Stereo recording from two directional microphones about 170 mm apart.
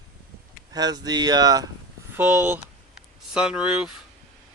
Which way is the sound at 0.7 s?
25° right (ahead or behind).